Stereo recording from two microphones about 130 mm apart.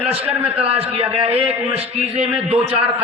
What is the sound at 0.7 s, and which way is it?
A man's voice, 50° right (ahead or behind).